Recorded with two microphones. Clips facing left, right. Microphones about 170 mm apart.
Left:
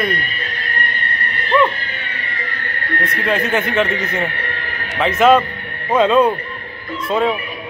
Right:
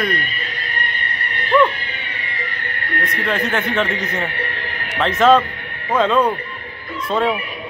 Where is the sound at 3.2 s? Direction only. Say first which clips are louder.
Left 3 dB; 5° left (ahead or behind).